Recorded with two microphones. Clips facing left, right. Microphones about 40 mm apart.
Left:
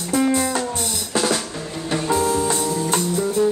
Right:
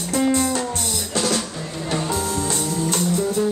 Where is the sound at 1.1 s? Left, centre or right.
Centre.